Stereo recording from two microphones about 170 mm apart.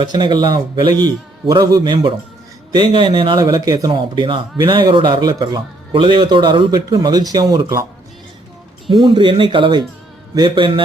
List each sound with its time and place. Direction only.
0.0 s speech: 25° right (ahead or behind)
8.9 s speech: 30° right (ahead or behind)